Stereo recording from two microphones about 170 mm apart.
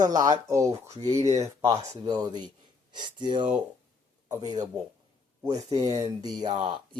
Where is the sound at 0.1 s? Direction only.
20° right (ahead or behind).